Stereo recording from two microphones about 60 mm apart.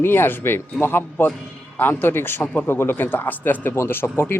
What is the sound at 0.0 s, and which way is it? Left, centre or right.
Speech, left.